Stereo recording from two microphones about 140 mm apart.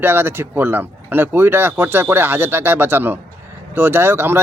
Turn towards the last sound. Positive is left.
turn(degrees=-15)  # may be behind; listen again after turning